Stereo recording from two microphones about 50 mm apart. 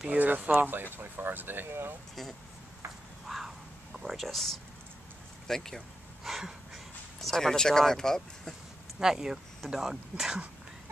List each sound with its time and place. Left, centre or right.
0.1 s speech: right
0.9 s speech: right
3.3 s a sound: centre
5.5 s speech: centre
9.0 s speech: centre